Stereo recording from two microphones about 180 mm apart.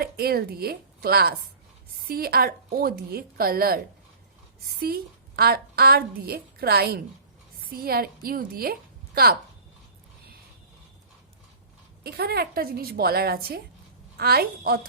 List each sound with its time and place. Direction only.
0.0 s a woman's voice: 60° right (ahead or behind)
5.4 s a woman's voice: 60° right (ahead or behind)
12.0 s a woman's voice: 60° right (ahead or behind)